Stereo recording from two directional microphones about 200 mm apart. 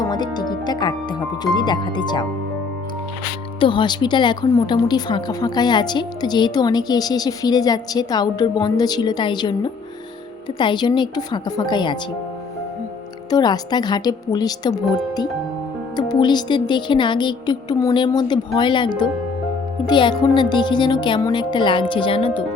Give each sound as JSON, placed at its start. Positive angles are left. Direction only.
{"t": 0.0, "sound": "a woman's voice", "side_deg": 20}
{"t": 3.6, "sound": "a woman's voice", "side_deg": 25}
{"t": 13.3, "sound": "a woman's voice", "side_deg": 20}